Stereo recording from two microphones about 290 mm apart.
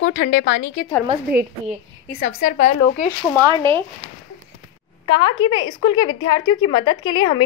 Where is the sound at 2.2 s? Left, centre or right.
Left.